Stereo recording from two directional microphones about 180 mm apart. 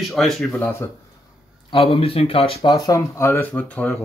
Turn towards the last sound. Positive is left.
turn(degrees=5)  # may be behind; listen again after turning